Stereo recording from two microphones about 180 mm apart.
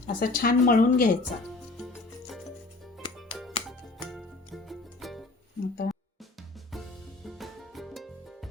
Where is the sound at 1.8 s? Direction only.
Centre (ahead or behind).